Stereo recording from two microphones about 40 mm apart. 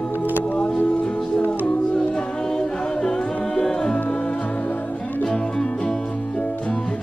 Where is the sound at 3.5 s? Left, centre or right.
Centre.